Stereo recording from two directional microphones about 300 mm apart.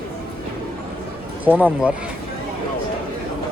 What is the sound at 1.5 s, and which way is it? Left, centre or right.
Speech, centre.